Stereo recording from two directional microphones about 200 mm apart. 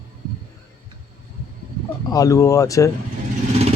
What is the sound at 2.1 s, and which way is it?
Speech, 15° left (ahead or behind).